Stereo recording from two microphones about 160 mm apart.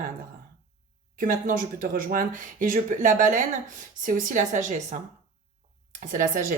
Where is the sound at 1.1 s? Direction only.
60° right (ahead or behind).